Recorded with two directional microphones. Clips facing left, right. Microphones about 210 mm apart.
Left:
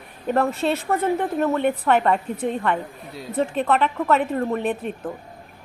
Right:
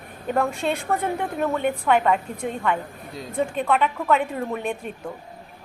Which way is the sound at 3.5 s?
10° right (ahead or behind).